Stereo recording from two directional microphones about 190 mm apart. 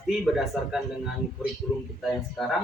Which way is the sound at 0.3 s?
Centre (ahead or behind).